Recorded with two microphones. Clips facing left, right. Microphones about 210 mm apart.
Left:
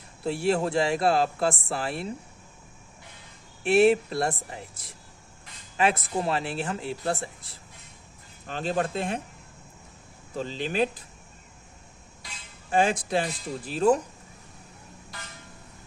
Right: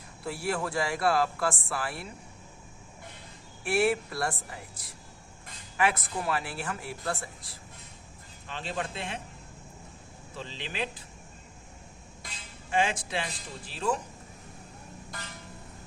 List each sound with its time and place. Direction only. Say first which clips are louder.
0.3 s speech: left 7 dB; 25° left (ahead or behind)
3.6 s speech: left 7 dB; 25° left (ahead or behind)
8.4 s speech: left 7 dB; 45° left (ahead or behind)
10.3 s speech: left 9 dB; 40° left (ahead or behind)
12.2 s a sound: even; 50° right (ahead or behind)
12.7 s speech: left 5 dB; 40° left (ahead or behind)
15.1 s music: right 1 dB; 50° right (ahead or behind)